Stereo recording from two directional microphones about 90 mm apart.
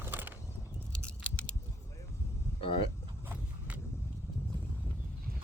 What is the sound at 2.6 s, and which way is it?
Vehicle, 75° left (ahead or behind).